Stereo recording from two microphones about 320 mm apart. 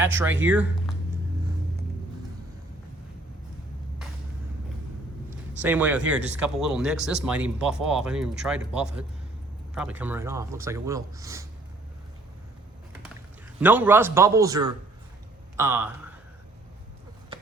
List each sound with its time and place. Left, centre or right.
0.0 s speech: centre
5.6 s speech: centre
13.6 s speech: centre
17.3 s basketball bounce: centre